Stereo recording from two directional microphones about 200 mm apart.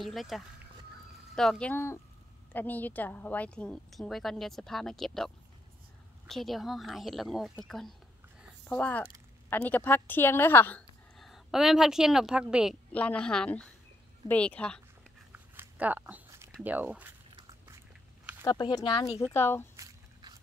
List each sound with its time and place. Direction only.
0.0 s a woman's voice: centre (ahead or behind)
12.9 s a woman's voice: 5° left (ahead or behind)
15.3 s biting: 10° right (ahead or behind)
16.6 s speech: 10° right (ahead or behind)
18.4 s speech: 20° left (ahead or behind)
19.8 s squish: 20° right (ahead or behind)